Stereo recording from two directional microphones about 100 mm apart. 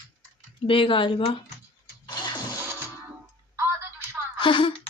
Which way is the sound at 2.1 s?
45° left (ahead or behind).